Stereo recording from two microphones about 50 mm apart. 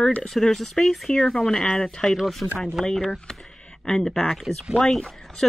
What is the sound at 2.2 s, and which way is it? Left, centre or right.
Speech, centre.